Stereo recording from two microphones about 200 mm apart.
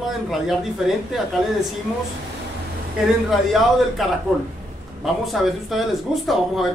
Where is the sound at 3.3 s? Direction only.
Centre (ahead or behind).